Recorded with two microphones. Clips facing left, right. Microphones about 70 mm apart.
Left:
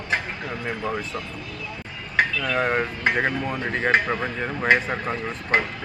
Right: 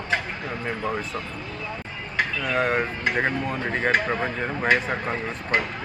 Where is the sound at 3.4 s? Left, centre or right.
Centre.